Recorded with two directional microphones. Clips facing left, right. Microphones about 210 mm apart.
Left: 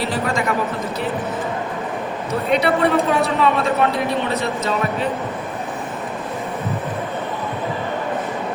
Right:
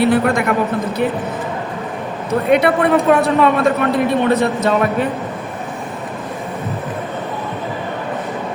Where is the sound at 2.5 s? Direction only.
55° right (ahead or behind).